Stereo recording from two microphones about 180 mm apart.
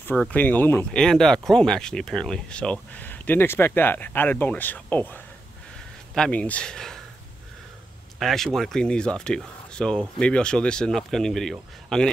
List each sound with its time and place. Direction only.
0.0 s speech: 5° left (ahead or behind)
8.2 s speech: centre (ahead or behind)